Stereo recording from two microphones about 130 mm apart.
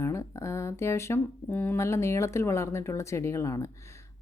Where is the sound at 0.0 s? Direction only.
20° left (ahead or behind).